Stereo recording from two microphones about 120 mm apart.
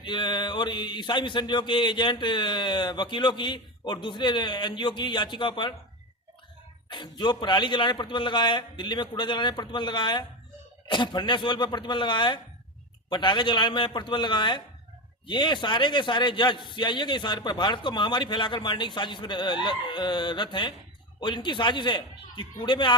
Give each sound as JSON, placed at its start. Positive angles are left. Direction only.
{"t": 0.0, "sound": "speech", "side_deg": 40}
{"t": 6.9, "sound": "speech", "side_deg": 40}